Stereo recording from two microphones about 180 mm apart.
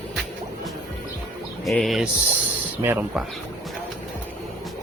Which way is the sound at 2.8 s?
10° right (ahead or behind).